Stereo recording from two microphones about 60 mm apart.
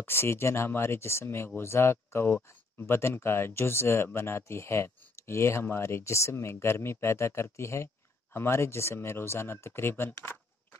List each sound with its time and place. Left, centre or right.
0.0 s speech: left